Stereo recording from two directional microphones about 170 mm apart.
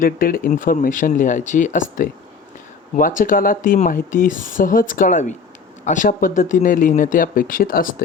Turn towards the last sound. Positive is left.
turn(degrees=55)  # may be behind; listen again after turning